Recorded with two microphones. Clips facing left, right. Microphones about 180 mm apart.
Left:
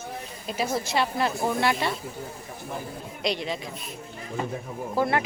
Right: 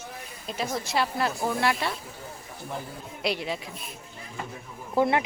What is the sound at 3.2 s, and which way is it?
Speech, 10° right (ahead or behind).